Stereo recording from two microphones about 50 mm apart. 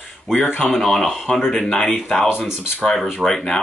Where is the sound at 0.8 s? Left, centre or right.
Centre.